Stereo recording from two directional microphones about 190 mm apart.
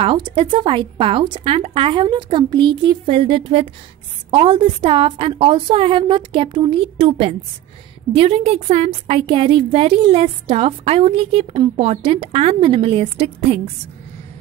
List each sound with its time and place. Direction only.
0.0 s a woman's voice: 25° right (ahead or behind)